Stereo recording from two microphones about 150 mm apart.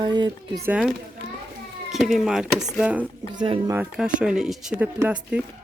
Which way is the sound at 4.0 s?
5° right (ahead or behind).